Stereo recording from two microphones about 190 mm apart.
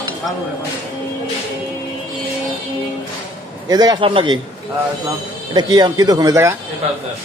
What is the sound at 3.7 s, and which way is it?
Speech, 20° right (ahead or behind).